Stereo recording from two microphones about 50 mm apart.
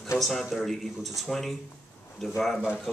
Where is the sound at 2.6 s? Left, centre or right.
Centre.